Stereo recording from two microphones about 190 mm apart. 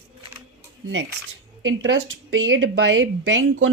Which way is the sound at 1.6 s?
85° right.